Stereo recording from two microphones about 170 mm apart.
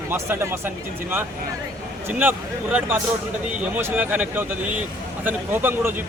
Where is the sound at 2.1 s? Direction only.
10° right (ahead or behind).